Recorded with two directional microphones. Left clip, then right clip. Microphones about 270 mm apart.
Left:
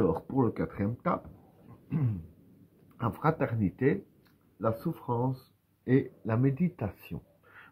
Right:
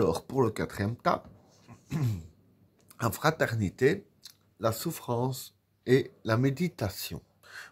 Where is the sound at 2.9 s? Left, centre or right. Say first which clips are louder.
Right 2 dB; right.